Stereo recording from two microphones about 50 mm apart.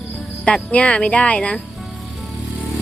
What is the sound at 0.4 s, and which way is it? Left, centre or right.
Speech, left.